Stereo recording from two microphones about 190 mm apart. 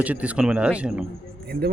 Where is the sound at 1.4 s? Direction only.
55° right (ahead or behind).